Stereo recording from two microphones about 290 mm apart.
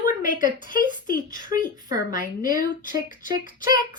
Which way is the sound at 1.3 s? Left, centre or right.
Centre.